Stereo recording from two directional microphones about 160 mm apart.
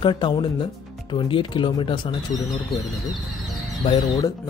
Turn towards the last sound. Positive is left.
turn(degrees=25)  # may be behind; listen again after turning